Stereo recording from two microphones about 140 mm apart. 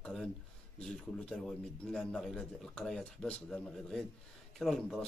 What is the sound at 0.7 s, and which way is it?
A man's voice, 5° left (ahead or behind).